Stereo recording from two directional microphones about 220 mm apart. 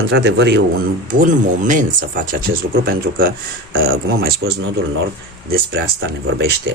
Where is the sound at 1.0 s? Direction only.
35° right (ahead or behind).